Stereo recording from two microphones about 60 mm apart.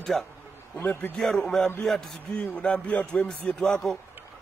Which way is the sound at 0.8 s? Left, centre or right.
Left.